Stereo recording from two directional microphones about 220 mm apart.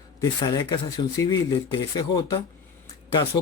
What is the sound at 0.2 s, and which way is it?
Speech, 15° left (ahead or behind).